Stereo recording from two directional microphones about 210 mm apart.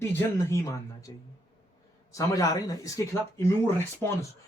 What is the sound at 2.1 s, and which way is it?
A man's voice, 15° left (ahead or behind).